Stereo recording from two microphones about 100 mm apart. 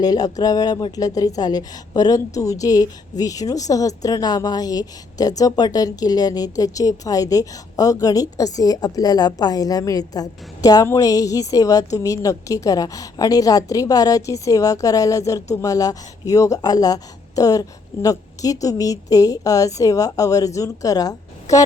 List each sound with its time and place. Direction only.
0.0 s a woman's voice: 40° left (ahead or behind)